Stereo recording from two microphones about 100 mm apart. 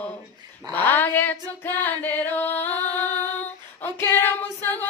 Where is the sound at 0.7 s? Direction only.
20° left (ahead or behind).